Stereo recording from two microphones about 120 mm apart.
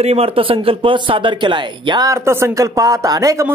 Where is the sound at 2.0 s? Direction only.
25° right (ahead or behind).